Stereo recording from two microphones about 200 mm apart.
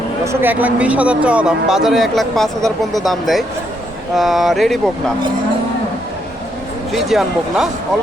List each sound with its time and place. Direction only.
0.3 s speech: 10° right (ahead or behind)
6.9 s speech: centre (ahead or behind)